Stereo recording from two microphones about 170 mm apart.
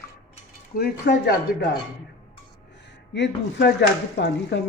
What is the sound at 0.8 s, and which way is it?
Speech, 70° left (ahead or behind).